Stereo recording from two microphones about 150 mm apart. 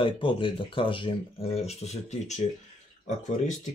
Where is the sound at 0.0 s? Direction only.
35° left (ahead or behind); by 2.4 s 50° left (ahead or behind).